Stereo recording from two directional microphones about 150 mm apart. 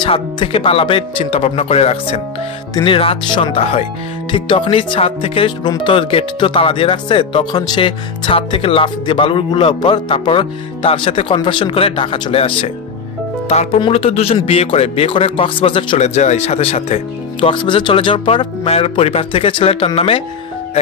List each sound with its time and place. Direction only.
0.0 s speech: 35° left (ahead or behind)
13.7 s speech: 40° left (ahead or behind)
16.2 s speech: 50° left (ahead or behind)